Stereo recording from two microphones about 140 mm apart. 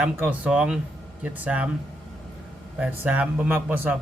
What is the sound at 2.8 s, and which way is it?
Speech, 15° right (ahead or behind).